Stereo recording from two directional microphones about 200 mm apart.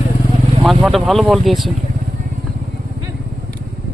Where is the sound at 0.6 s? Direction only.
Centre (ahead or behind).